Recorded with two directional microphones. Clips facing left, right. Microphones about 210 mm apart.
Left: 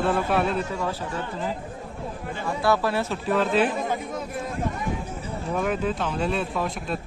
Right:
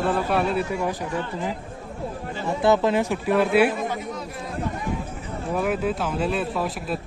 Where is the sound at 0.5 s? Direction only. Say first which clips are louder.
Right 3 dB; 15° right (ahead or behind).